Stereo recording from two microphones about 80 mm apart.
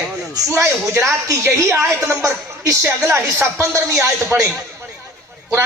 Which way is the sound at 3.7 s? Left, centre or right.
Right.